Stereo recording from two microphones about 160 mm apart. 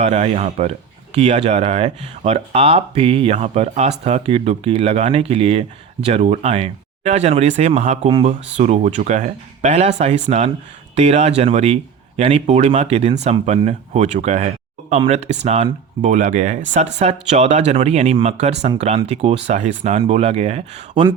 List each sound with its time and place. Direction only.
0.0 s speech: 45° right (ahead or behind)